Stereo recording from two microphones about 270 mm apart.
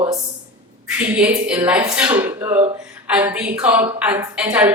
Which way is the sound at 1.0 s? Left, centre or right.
Centre.